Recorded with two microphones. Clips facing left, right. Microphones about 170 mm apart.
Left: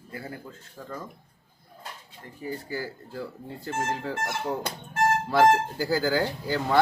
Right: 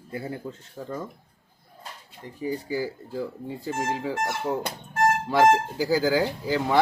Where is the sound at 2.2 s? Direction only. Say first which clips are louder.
Right 5 dB; 15° right (ahead or behind).